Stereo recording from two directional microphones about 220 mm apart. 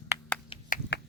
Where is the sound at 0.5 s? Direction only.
25° left (ahead or behind).